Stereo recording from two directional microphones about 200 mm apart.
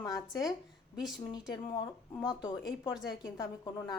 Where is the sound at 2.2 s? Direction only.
20° left (ahead or behind).